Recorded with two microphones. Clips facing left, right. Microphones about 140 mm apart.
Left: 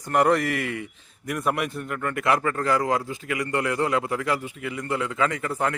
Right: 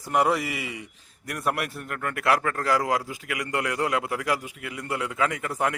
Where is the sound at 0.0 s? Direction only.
5° right (ahead or behind).